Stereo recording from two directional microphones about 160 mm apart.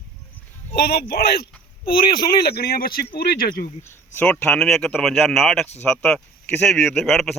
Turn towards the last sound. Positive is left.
turn(degrees=0)  # may be behind; listen again after turning